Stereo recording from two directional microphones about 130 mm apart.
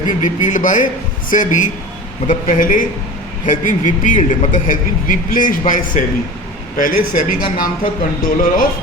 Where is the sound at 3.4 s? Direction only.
80° left.